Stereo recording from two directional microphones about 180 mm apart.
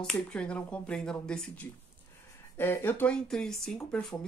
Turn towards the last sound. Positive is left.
turn(degrees=5)  # may be behind; listen again after turning